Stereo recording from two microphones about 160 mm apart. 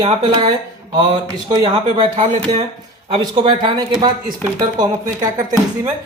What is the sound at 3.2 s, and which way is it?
Speech, 30° right (ahead or behind).